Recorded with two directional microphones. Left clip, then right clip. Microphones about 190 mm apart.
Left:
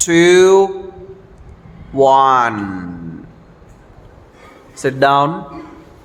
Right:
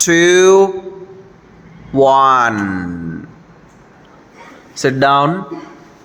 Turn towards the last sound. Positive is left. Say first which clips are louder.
# right 1 dB
turn(degrees=-20)  # may be behind; listen again after turning